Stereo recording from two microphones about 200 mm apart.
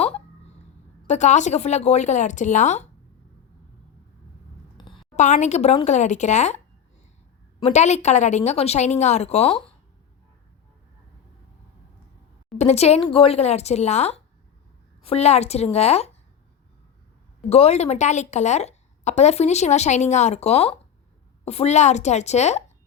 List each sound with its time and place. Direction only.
1.0 s a woman's voice: 35° left (ahead or behind)
4.8 s a sound: 20° left (ahead or behind)
5.1 s a woman's voice: 35° left (ahead or behind)
7.6 s a woman's voice: 35° left (ahead or behind)
12.5 s a woman's voice: 30° left (ahead or behind)
17.5 s a woman's voice: 30° left (ahead or behind)